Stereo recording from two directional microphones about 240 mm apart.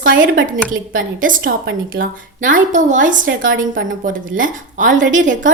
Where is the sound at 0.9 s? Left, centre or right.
Right.